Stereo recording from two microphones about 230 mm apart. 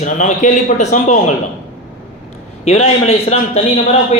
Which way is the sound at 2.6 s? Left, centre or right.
Left.